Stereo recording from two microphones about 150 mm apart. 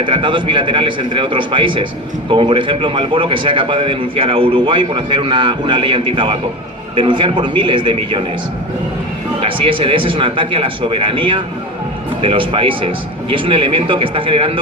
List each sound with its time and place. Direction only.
0.0 s a man's voice: 35° right (ahead or behind)
9.4 s a man's voice: 35° right (ahead or behind)